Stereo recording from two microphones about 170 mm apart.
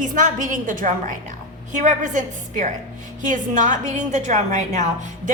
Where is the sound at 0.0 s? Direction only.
50° right (ahead or behind).